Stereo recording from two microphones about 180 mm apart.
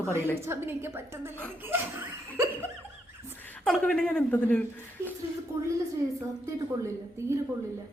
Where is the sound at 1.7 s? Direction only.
10° right (ahead or behind).